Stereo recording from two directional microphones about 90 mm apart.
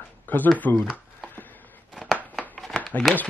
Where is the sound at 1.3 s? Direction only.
20° left (ahead or behind).